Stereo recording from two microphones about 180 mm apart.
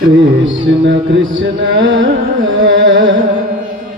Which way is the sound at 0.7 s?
90° right.